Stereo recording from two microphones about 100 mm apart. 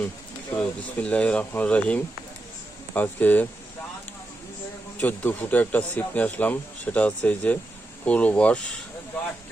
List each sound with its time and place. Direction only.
0.5 s speech: 15° left (ahead or behind)
4.9 s speech: 15° left (ahead or behind)